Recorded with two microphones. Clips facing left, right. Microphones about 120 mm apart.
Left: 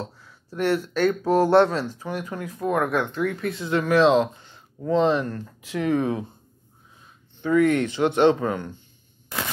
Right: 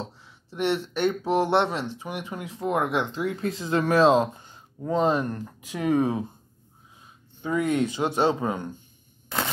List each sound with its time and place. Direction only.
0.0 s speech: 20° right (ahead or behind); by 4.5 s 40° right (ahead or behind)
4.5 s a sound: 10° right (ahead or behind)
5.2 s speech: 20° right (ahead or behind)
7.4 s speech: 15° right (ahead or behind)